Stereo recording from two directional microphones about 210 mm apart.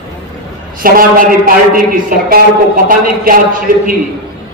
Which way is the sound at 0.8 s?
45° right (ahead or behind).